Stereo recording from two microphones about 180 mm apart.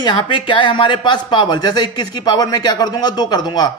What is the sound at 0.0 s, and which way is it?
Speech, 25° left (ahead or behind).